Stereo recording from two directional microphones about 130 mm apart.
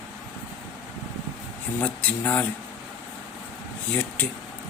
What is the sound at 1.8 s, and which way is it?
Speech, 10° left (ahead or behind).